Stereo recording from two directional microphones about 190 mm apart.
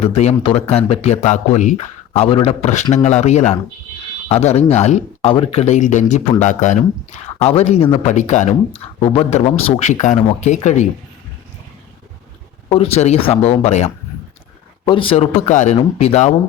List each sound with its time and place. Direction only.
0.0 s speech: 35° left (ahead or behind)
12.6 s speech: 30° left (ahead or behind)